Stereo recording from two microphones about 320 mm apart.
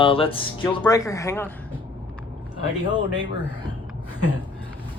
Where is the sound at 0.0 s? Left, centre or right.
Centre.